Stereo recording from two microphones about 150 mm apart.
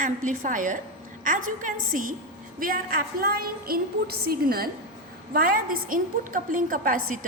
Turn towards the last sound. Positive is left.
turn(degrees=-65)  # may be behind; listen again after turning